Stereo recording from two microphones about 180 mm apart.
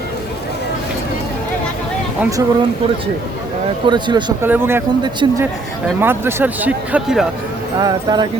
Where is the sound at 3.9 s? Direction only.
25° right (ahead or behind).